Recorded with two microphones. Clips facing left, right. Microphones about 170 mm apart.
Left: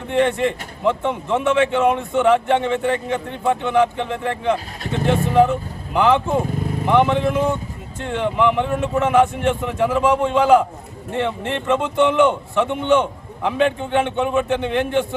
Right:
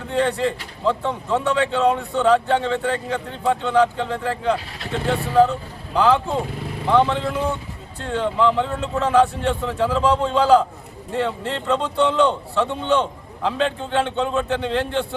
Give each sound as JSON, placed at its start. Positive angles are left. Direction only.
{"t": 0.1, "sound": "speech", "side_deg": 20}